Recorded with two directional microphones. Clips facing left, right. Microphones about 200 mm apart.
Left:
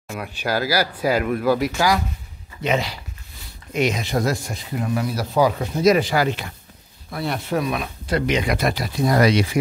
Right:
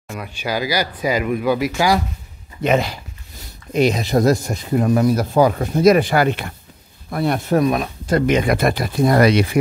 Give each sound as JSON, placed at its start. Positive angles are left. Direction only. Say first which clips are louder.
{"t": 0.1, "sound": "speech", "louder": "even", "side_deg": 0}
{"t": 2.6, "sound": "speech", "louder": "right 5 dB", "side_deg": -50}
{"t": 3.7, "sound": "speech", "louder": "right 5 dB", "side_deg": -35}